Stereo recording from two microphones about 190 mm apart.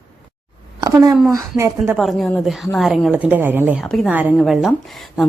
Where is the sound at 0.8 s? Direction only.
20° right (ahead or behind).